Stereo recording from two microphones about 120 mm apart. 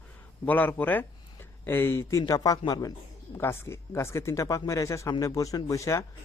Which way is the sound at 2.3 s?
30° left (ahead or behind).